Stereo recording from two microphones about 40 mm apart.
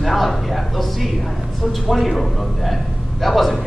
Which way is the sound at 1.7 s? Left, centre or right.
Centre.